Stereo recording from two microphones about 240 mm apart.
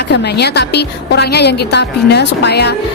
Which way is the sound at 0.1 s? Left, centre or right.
Left.